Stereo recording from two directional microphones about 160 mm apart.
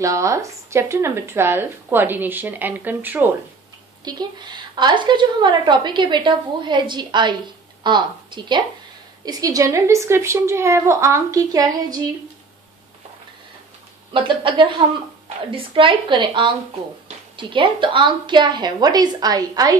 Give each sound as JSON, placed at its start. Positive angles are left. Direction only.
{"t": 0.0, "sound": "speech", "side_deg": -20}
{"t": 4.0, "sound": "a woman's voice", "side_deg": -25}
{"t": 14.1, "sound": "a woman's voice", "side_deg": -30}